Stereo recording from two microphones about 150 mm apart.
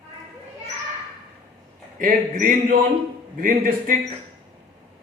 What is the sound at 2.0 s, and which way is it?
A man's voice, 65° right (ahead or behind).